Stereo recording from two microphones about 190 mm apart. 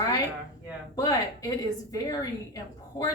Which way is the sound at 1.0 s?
20° left (ahead or behind).